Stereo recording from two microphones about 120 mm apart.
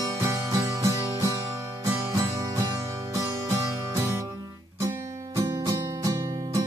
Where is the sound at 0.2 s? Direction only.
30° right (ahead or behind).